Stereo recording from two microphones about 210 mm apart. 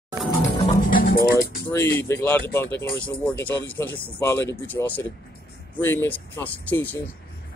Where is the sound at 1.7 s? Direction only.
10° left (ahead or behind).